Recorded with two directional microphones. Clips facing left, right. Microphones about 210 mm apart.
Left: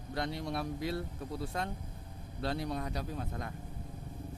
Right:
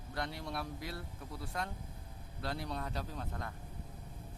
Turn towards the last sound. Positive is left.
turn(degrees=15)  # may be behind; listen again after turning